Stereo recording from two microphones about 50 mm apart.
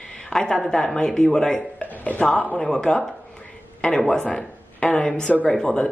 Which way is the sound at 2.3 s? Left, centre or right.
Left.